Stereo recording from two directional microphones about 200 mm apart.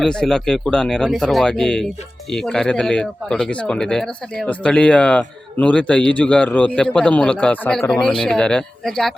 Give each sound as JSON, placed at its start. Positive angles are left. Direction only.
{"t": 0.0, "sound": "speech", "side_deg": 5}